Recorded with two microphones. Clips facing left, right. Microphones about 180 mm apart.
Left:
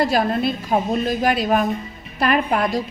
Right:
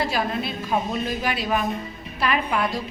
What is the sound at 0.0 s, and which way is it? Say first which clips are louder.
A woman's voice: left 6 dB; 45° left (ahead or behind).